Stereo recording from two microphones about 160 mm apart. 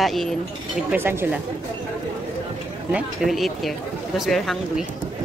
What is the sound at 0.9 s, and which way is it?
Speech, 15° right (ahead or behind).